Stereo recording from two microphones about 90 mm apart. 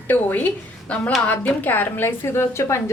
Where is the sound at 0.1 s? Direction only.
20° left (ahead or behind).